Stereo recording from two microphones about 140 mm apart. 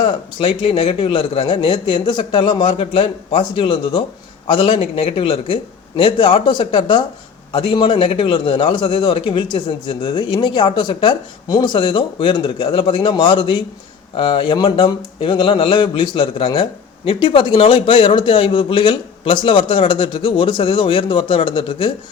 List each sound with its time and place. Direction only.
0.0 s a man's voice: 35° left (ahead or behind)
4.8 s a man's voice: 50° left (ahead or behind)